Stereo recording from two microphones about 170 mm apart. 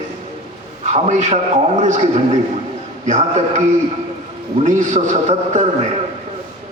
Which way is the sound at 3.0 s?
45° right (ahead or behind).